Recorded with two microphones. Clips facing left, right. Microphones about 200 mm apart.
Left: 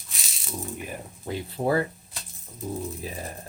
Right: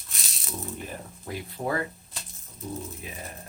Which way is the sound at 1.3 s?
30° left (ahead or behind).